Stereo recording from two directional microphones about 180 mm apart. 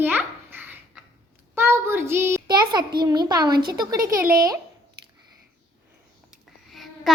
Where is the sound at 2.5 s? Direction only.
25° right (ahead or behind).